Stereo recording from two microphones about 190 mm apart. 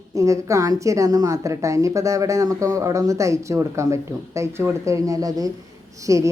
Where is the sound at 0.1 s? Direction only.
15° right (ahead or behind).